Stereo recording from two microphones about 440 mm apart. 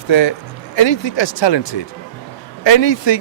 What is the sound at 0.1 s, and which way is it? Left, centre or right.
Speech, left.